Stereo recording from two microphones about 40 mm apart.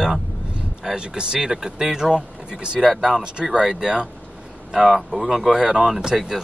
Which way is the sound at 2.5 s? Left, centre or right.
Right.